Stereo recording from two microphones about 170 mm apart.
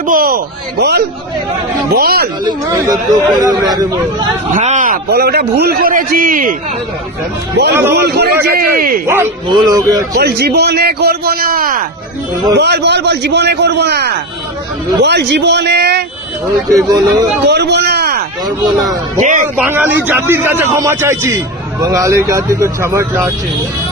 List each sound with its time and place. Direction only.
0.0 s a man's voice: 55° right (ahead or behind)
2.4 s speech: 25° right (ahead or behind)
4.5 s speech: 45° right (ahead or behind)
5.0 s a man's voice: 65° right (ahead or behind)
7.5 s a man's voice: 75° right (ahead or behind)
8.5 s a man's voice: 60° right (ahead or behind)
9.0 s a man's voice: 15° right (ahead or behind)
10.2 s a man's voice: 70° right (ahead or behind)
12.5 s a man's voice: 80° right
15.0 s a man's voice: 85° right
16.6 s speech: 20° right (ahead or behind)
17.4 s a man's voice: 80° right
19.2 s speech: 45° right (ahead or behind)
19.5 s a man's voice: 10° right (ahead or behind)